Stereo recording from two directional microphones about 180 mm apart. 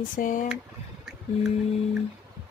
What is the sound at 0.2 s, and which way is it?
Speech, 45° left (ahead or behind).